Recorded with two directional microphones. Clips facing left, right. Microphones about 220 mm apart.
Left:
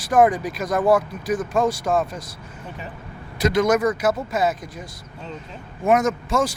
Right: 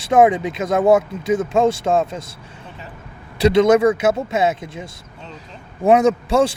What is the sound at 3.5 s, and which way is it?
Speech, 25° right (ahead or behind).